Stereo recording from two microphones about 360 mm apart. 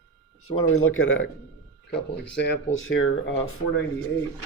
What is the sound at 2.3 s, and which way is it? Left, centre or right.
Speech, left.